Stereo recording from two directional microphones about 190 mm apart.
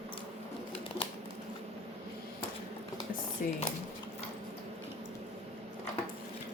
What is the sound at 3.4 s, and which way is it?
Speech, 45° left (ahead or behind).